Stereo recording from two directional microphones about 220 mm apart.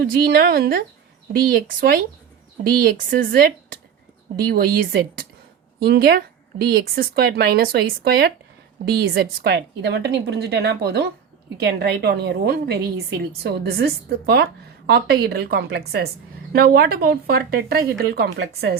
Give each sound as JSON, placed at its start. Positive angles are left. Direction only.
{"t": 0.0, "sound": "speech", "side_deg": -45}
{"t": 5.8, "sound": "speech", "side_deg": -45}